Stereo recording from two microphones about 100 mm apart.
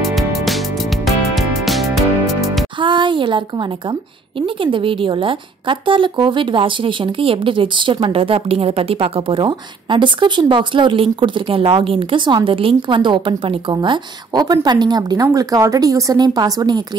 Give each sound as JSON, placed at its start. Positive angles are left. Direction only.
{"t": 0.0, "sound": "music", "side_deg": 0}
{"t": 2.8, "sound": "a sound", "side_deg": -55}
{"t": 4.4, "sound": "a woman's voice", "side_deg": -60}